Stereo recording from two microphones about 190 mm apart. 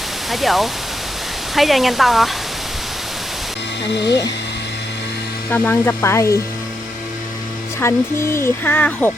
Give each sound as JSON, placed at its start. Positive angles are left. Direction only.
{"t": 0.3, "sound": "speech", "side_deg": 0}
{"t": 3.8, "sound": "speech", "side_deg": 65}
{"t": 5.5, "sound": "speech", "side_deg": 10}
{"t": 7.8, "sound": "speech", "side_deg": 15}